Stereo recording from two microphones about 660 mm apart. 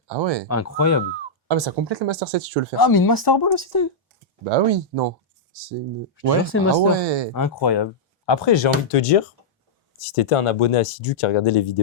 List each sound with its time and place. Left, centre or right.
0.1 s speech: right
0.4 s speech: left
1.5 s speech: right
2.7 s speech: left
4.4 s speech: right
6.1 s speech: centre
6.9 s speech: right
7.3 s speech: left